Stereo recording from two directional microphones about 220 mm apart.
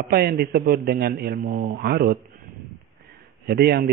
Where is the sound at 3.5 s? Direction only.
50° right (ahead or behind).